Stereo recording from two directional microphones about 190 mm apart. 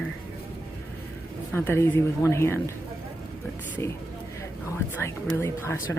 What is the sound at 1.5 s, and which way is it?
Speech, 10° left (ahead or behind).